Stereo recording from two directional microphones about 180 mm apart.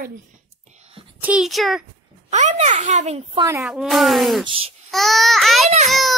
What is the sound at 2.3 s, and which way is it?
Speech, 40° right (ahead or behind).